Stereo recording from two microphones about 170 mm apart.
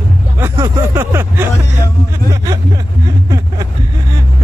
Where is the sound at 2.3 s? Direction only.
20° right (ahead or behind).